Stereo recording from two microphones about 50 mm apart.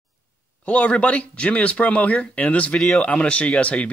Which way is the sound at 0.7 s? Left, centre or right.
Left.